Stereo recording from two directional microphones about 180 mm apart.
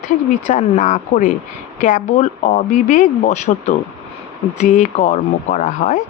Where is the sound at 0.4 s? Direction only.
45° left (ahead or behind).